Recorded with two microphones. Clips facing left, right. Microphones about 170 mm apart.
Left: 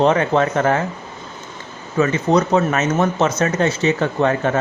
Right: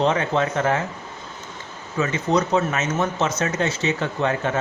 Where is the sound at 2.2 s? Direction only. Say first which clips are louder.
Left 2 dB; 50° left (ahead or behind).